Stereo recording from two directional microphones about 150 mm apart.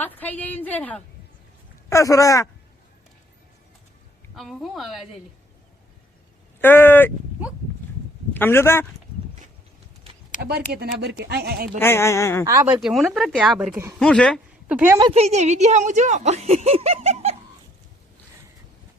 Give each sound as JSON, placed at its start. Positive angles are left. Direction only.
{"t": 0.0, "sound": "a woman's voice", "side_deg": 10}
{"t": 1.9, "sound": "speech", "side_deg": 20}
{"t": 4.4, "sound": "speech", "side_deg": 0}
{"t": 6.6, "sound": "a woman's voice", "side_deg": 15}
{"t": 8.3, "sound": "a man's voice", "side_deg": 15}
{"t": 10.4, "sound": "speech", "side_deg": -90}
{"t": 11.8, "sound": "a woman's voice", "side_deg": 15}
{"t": 12.5, "sound": "speech", "side_deg": -30}
{"t": 12.8, "sound": "speech", "side_deg": 0}
{"t": 14.7, "sound": "a woman's voice", "side_deg": -10}
{"t": 15.1, "sound": "speech", "side_deg": -45}